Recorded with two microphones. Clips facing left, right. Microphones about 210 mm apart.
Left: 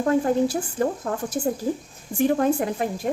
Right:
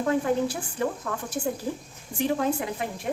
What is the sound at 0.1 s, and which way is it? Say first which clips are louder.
Speech: left 5 dB; 40° left (ahead or behind).